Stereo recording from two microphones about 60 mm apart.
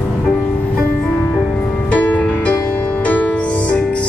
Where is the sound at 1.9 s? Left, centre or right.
Left.